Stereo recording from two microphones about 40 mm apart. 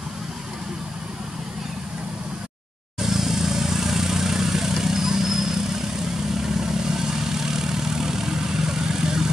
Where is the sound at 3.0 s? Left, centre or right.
Centre.